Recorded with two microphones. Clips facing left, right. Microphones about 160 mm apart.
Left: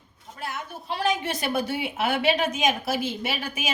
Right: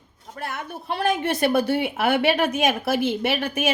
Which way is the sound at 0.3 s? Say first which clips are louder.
Right 3 dB; 55° right (ahead or behind).